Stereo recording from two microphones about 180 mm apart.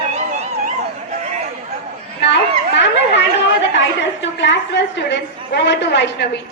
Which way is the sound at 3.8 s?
80° left.